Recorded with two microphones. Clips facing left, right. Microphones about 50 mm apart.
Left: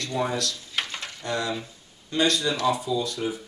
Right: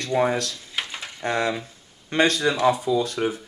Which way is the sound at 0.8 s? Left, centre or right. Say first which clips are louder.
Even; centre.